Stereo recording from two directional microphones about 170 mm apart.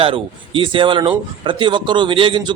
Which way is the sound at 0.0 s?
30° right (ahead or behind).